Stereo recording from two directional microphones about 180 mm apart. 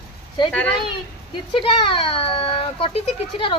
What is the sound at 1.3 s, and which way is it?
Speech, 30° left (ahead or behind).